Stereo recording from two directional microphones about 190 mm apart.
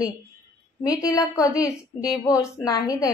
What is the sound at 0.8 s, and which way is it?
A woman's voice, 15° left (ahead or behind).